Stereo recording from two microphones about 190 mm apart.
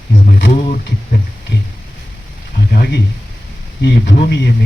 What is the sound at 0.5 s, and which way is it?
Speech, 45° left (ahead or behind).